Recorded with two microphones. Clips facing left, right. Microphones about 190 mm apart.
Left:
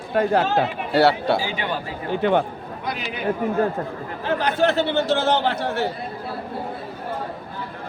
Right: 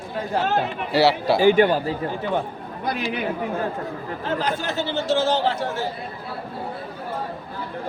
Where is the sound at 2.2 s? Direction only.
70° left (ahead or behind).